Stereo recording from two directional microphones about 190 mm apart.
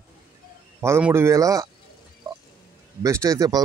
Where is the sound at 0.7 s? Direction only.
10° right (ahead or behind).